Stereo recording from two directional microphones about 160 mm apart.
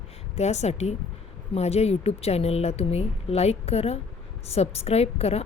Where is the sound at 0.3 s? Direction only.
45° left (ahead or behind).